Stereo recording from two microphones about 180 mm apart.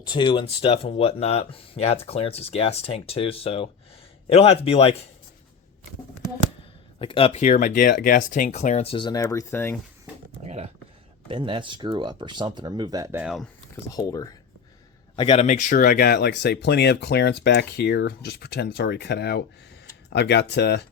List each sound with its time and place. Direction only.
0.0 s speech: 25° left (ahead or behind)
7.0 s speech: 30° left (ahead or behind); by 9.7 s 15° left (ahead or behind)
10.4 s a sound: 40° right (ahead or behind)
11.3 s speech: 30° right (ahead or behind); by 13.5 s centre (ahead or behind)
13.9 s a man's voice: 20° left (ahead or behind)
15.4 s speech: 50° left (ahead or behind); by 20.8 s 70° left (ahead or behind)